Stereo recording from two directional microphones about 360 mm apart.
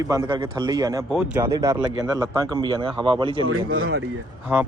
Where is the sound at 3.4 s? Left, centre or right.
Right.